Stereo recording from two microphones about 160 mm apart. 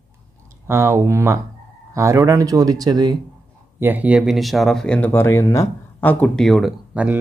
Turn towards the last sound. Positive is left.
turn(degrees=-5)  # may be behind; listen again after turning